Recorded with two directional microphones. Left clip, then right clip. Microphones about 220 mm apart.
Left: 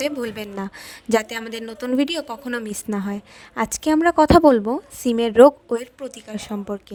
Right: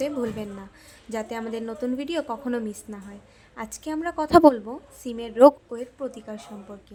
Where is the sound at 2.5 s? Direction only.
45° left (ahead or behind).